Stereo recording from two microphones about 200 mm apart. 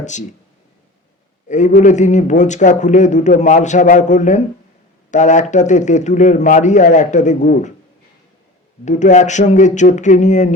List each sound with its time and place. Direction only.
0.0 s speech: 35° left (ahead or behind)
1.5 s a man's voice: 35° left (ahead or behind)
8.8 s speech: 35° left (ahead or behind)